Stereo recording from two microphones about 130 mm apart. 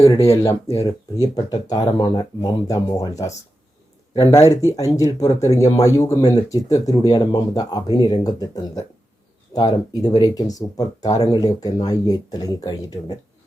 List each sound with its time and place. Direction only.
0.9 s speech: 35° left (ahead or behind)